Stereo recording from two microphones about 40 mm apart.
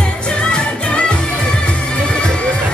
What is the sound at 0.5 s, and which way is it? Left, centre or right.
Music, left.